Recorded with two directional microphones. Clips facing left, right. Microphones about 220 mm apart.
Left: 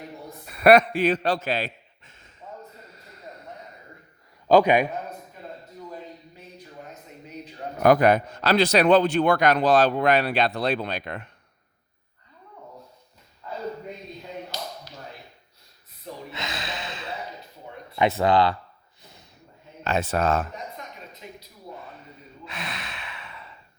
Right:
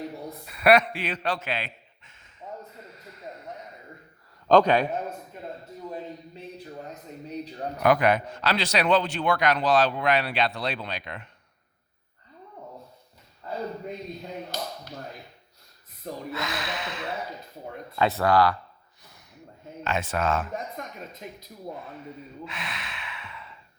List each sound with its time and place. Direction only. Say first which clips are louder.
0.4 s a man's voice: left 4 dB; 45° left (ahead or behind)
2.4 s a sound: right 2 dB; 10° right (ahead or behind)
4.4 s a man's voice: left 1 dB; 10° left (ahead or behind)
7.8 s a man's voice: left 4 dB; 40° left (ahead or behind)
14.5 s tap: right 3 dB; 50° right (ahead or behind)
16.3 s gasp: right 2 dB; 25° left (ahead or behind)
18.2 s speech: even; 20° left (ahead or behind)
19.8 s a man's voice: left 3 dB; 40° left (ahead or behind)
21.2 s a sound: even; 45° right (ahead or behind)
22.4 s gasp: left 6 dB; 40° left (ahead or behind)